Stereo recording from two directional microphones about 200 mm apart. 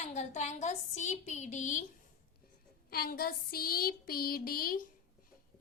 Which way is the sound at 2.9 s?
50° left (ahead or behind).